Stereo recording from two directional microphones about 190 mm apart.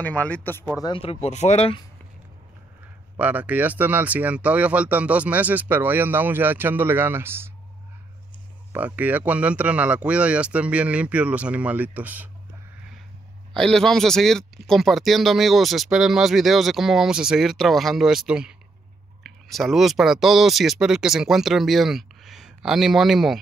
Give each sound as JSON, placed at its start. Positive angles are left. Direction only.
{"t": 0.0, "sound": "speech", "side_deg": 10}
{"t": 3.2, "sound": "speech", "side_deg": -10}
{"t": 8.7, "sound": "speech", "side_deg": -10}
{"t": 13.5, "sound": "speech", "side_deg": 0}